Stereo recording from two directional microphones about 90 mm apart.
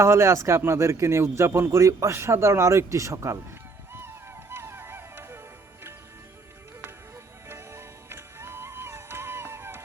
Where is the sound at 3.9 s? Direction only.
25° right (ahead or behind).